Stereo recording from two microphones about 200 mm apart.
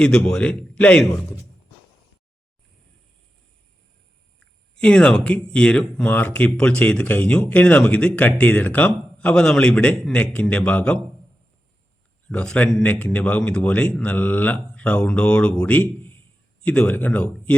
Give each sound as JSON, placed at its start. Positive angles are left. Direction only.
{"t": 0.0, "sound": "speech", "side_deg": 5}
{"t": 4.7, "sound": "speech", "side_deg": 5}
{"t": 12.3, "sound": "a man's voice", "side_deg": 5}